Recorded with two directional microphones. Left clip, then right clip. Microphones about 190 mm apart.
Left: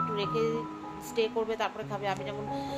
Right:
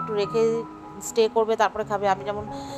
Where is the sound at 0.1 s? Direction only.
35° right (ahead or behind).